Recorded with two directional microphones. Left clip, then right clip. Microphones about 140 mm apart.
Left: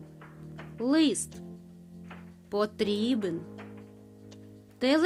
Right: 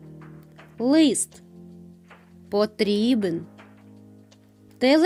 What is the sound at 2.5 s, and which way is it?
Speech, 30° right (ahead or behind).